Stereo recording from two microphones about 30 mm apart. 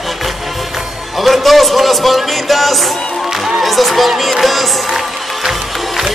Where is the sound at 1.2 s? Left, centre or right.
Centre.